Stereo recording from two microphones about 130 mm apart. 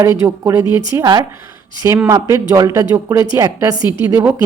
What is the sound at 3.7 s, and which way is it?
Speech, 35° left (ahead or behind).